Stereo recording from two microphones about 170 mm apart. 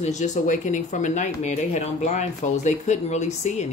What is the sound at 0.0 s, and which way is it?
Speech, 45° left (ahead or behind).